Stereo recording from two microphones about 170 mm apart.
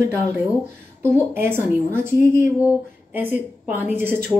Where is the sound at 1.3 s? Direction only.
15° right (ahead or behind).